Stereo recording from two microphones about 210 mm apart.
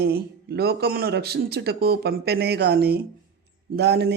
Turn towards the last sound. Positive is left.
turn(degrees=-55)  # may be behind; listen again after turning